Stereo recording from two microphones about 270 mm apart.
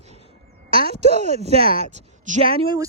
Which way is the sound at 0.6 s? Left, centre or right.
Right.